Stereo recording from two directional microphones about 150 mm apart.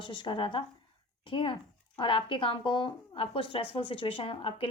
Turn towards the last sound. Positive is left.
turn(degrees=35)  # may be behind; listen again after turning